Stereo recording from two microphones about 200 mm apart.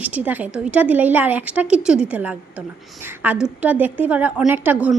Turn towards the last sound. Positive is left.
turn(degrees=-10)  # may be behind; listen again after turning